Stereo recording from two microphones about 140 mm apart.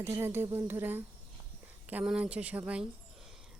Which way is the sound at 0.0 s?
15° right (ahead or behind).